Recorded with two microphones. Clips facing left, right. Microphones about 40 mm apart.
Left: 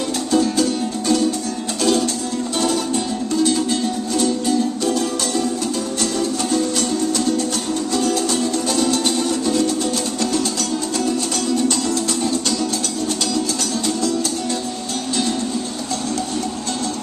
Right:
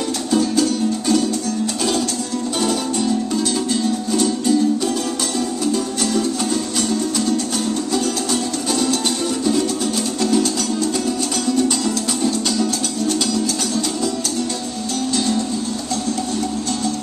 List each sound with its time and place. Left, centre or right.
0.3 s music: centre